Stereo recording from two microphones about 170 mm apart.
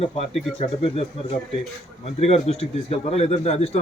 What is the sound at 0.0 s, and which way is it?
A man's voice, 35° left (ahead or behind).